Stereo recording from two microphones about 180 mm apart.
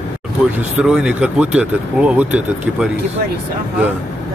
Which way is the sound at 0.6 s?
5° right (ahead or behind).